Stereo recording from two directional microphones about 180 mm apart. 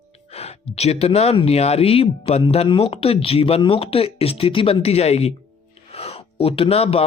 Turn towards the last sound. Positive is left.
turn(degrees=35)  # may be behind; listen again after turning